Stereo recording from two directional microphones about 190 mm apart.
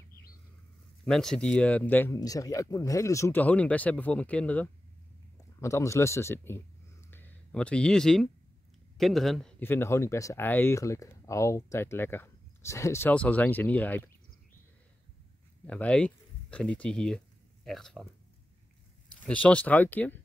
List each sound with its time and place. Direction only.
1.0 s speech: 5° left (ahead or behind)
7.1 s a sound: 10° left (ahead or behind)
8.9 s speech: centre (ahead or behind)
15.6 s speech: 5° left (ahead or behind)
19.2 s speech: 5° left (ahead or behind)